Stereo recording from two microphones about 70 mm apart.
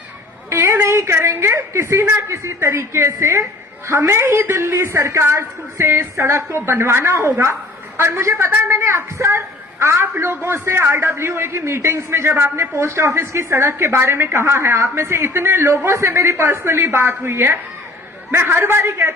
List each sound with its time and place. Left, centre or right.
0.5 s a man's voice: right